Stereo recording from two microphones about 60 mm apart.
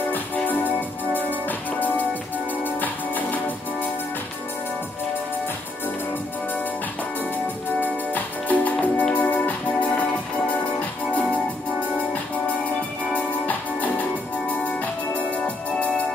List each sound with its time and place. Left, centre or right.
0.1 s music: left
2.6 s music: left
7.8 s music: left
13.1 s organ: left